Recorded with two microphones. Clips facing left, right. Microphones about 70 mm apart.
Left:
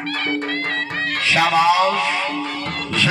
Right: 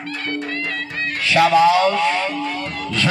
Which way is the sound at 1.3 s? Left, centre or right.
Centre.